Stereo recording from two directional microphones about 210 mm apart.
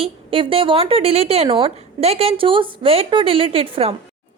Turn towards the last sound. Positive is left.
turn(degrees=-25)  # may be behind; listen again after turning